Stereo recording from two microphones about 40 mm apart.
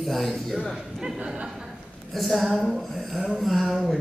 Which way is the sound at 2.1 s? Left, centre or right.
Centre.